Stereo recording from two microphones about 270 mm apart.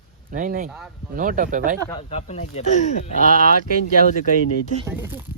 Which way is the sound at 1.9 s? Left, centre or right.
Left.